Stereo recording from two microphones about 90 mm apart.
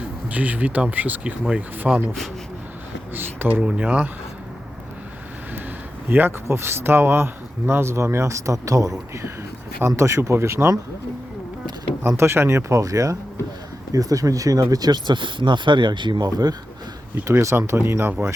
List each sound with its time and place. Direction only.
0.3 s speech: 15° right (ahead or behind)
1.8 s speech: 5° right (ahead or behind)
3.2 s speech: 25° right (ahead or behind)
6.1 s speech: 25° right (ahead or behind)
12.0 s speech: 30° right (ahead or behind); by 16.6 s 50° right (ahead or behind)
17.2 s speech: 30° right (ahead or behind)